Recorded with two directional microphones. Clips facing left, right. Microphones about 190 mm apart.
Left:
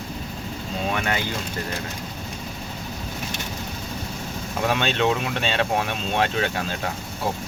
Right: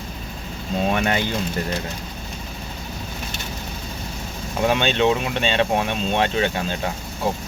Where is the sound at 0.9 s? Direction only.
25° right (ahead or behind).